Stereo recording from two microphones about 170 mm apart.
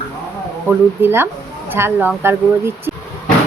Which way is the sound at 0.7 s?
10° right (ahead or behind).